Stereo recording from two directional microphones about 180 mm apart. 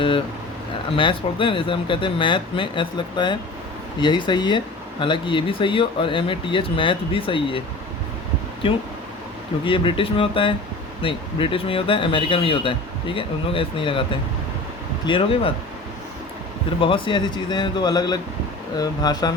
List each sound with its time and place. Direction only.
0.9 s speech: 30° left (ahead or behind)
9.6 s speech: 30° left (ahead or behind)
15.0 s speech: 30° left (ahead or behind)
16.8 s speech: 25° left (ahead or behind)